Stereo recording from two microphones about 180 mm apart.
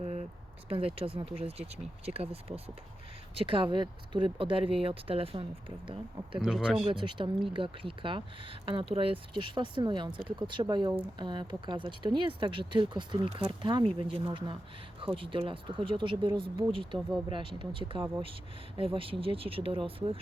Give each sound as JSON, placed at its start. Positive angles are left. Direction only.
{"t": 0.0, "sound": "a sound", "side_deg": -35}
{"t": 0.7, "sound": "speech", "side_deg": -30}
{"t": 6.4, "sound": "speech", "side_deg": 0}
{"t": 6.8, "sound": "speech", "side_deg": -30}